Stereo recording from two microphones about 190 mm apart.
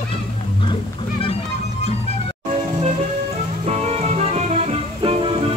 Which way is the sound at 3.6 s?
35° right (ahead or behind).